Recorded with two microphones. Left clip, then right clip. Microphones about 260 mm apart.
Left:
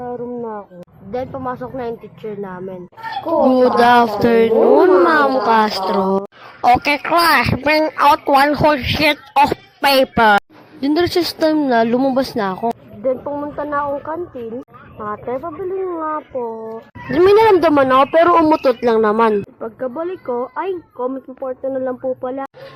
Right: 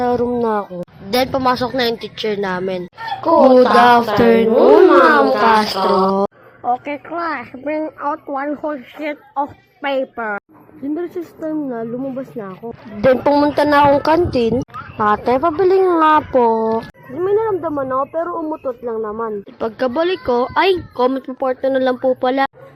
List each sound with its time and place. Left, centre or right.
0.0 s a sound: right
1.1 s speech: right
6.6 s a woman's voice: left
13.2 s speech: right
17.2 s a woman's voice: left
19.5 s speech: right